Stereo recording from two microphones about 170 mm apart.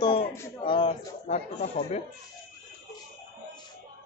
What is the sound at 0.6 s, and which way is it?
Speech, 30° left (ahead or behind).